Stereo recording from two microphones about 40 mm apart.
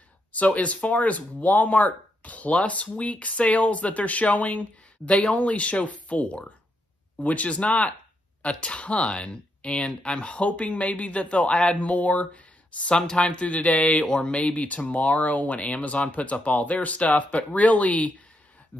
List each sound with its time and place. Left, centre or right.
0.3 s speech: left
14.0 s speech: left
14.4 s speech: left